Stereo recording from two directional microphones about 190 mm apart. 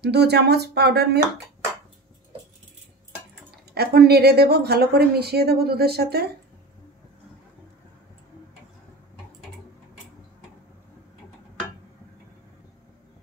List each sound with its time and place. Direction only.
0.0 s a woman's voice: 60° right (ahead or behind)
3.7 s a woman's voice: 55° right (ahead or behind)